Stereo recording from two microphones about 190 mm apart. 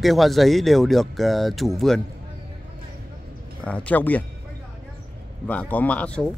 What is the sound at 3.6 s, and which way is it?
Speech, 5° left (ahead or behind).